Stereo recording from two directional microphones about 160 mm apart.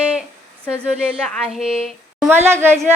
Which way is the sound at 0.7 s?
10° right (ahead or behind).